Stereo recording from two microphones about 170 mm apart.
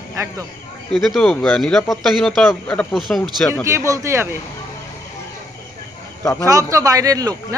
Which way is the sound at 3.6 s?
20° right (ahead or behind).